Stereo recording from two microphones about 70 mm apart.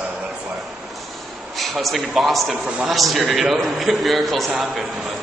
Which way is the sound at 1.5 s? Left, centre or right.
Centre.